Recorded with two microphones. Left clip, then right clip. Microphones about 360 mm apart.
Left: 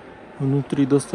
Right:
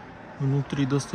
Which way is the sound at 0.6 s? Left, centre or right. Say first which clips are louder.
Left 9 dB; centre.